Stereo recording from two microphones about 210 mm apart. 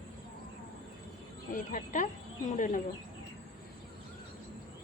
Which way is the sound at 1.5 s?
40° left (ahead or behind).